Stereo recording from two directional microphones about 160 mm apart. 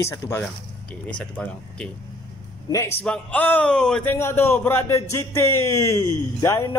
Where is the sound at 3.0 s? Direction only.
5° left (ahead or behind).